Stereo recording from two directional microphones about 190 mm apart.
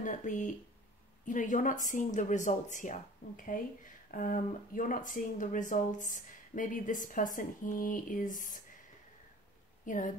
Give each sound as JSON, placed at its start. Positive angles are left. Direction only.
{"t": 0.0, "sound": "a woman's voice", "side_deg": 40}
{"t": 9.8, "sound": "a woman's voice", "side_deg": 40}